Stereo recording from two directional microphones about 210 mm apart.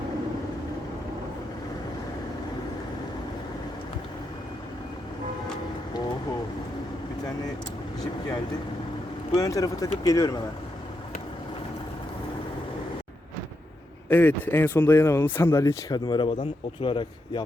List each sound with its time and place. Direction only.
9.3 s speech: 15° left (ahead or behind)
14.1 s speech: 10° left (ahead or behind); by 17.4 s 25° left (ahead or behind)